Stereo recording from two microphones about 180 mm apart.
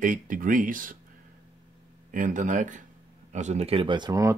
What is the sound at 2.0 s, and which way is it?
Speech, 45° right (ahead or behind).